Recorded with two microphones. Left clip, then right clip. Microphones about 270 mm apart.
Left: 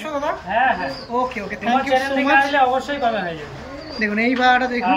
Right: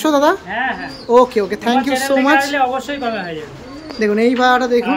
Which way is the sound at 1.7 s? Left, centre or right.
Centre.